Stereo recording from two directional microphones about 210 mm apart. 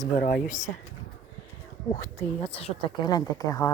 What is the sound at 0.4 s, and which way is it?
Speech, 35° left (ahead or behind).